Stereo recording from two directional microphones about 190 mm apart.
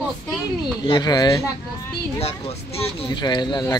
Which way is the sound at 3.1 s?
25° left (ahead or behind).